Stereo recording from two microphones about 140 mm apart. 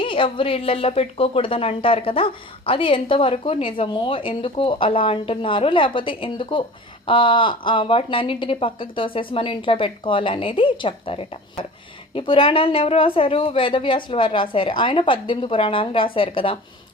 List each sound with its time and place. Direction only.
0.0 s a woman's voice: 40° left (ahead or behind)